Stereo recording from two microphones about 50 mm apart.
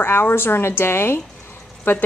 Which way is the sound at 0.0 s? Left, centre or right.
Left.